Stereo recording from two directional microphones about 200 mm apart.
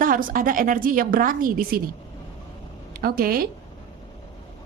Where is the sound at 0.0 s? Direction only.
45° right (ahead or behind).